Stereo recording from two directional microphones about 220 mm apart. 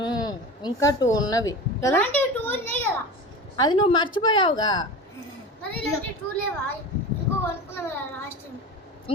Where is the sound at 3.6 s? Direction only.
20° left (ahead or behind).